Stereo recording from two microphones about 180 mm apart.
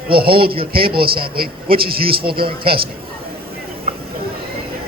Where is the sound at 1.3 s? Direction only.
55° right (ahead or behind).